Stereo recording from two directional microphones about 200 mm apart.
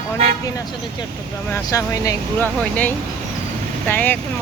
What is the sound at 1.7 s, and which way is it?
Speech, 15° left (ahead or behind).